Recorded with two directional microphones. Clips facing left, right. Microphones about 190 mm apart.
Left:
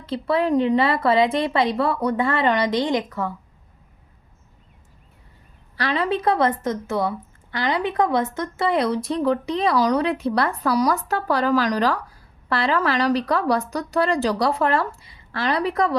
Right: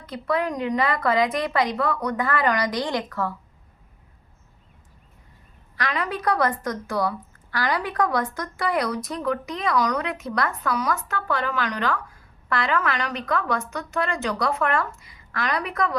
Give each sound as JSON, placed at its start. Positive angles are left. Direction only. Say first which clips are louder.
{"t": 0.0, "sound": "speech", "louder": "left 4 dB", "side_deg": 30}
{"t": 5.7, "sound": "speech", "louder": "left 5 dB", "side_deg": 30}